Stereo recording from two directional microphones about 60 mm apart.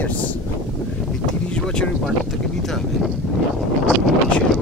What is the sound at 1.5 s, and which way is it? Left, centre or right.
Speech, centre.